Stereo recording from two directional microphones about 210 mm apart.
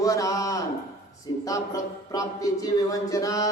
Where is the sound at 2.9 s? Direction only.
15° left (ahead or behind).